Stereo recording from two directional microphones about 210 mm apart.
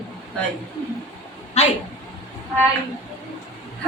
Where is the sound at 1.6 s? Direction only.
30° left (ahead or behind).